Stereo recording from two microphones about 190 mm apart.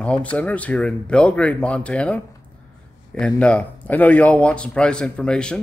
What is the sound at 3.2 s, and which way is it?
A man's voice, 5° left (ahead or behind).